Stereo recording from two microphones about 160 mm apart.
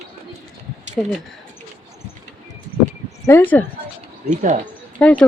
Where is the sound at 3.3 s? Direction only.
15° left (ahead or behind).